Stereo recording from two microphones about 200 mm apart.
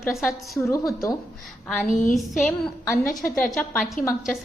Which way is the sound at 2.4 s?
Centre (ahead or behind).